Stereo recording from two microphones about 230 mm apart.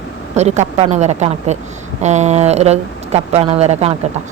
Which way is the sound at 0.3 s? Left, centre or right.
Right.